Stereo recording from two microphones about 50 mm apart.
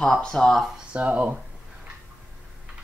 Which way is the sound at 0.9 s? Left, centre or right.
Right.